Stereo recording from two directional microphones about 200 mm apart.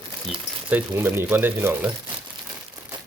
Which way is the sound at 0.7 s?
10° right (ahead or behind).